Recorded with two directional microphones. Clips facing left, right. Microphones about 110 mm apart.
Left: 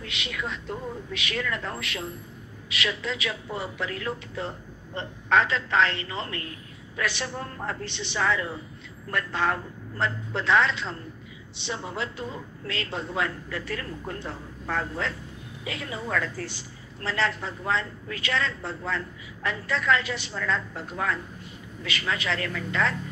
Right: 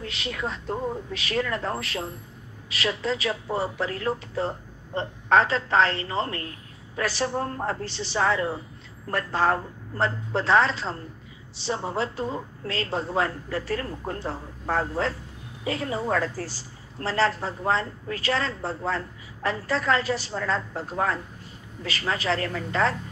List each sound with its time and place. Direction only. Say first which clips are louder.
0.0 s a woman's voice: right 3 dB; 35° right (ahead or behind)